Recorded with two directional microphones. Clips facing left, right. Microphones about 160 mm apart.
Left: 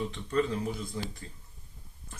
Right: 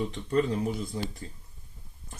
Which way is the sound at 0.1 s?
35° right (ahead or behind).